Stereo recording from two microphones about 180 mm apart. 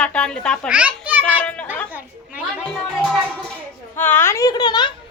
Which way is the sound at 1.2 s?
5° left (ahead or behind).